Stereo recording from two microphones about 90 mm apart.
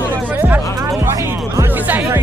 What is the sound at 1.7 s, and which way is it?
Music, 20° right (ahead or behind).